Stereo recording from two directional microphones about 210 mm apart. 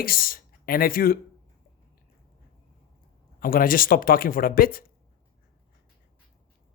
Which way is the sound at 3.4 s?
40° left (ahead or behind).